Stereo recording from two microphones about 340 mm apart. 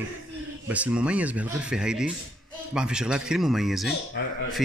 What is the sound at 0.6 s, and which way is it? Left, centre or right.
Speech, centre.